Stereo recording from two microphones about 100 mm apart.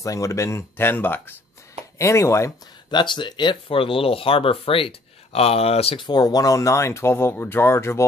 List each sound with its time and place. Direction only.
0.0 s speech: 35° left (ahead or behind)
2.9 s speech: 50° left (ahead or behind); by 6.0 s 80° left
6.0 s speech: 40° left (ahead or behind); by 8.0 s 25° left (ahead or behind)